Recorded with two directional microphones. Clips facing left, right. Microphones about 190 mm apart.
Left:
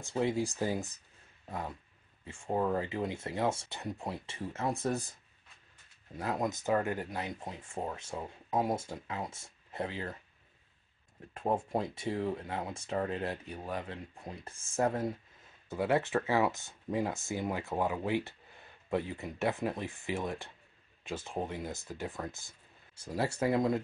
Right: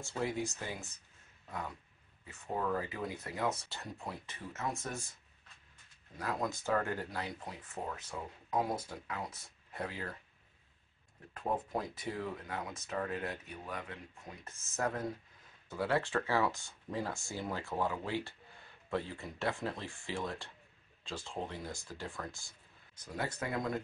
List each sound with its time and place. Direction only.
0.0 s speech: 20° left (ahead or behind); by 0.9 s 35° left (ahead or behind)
2.2 s speech: 30° left (ahead or behind)
6.1 s speech: 25° left (ahead or behind)
11.3 s speech: 25° left (ahead or behind)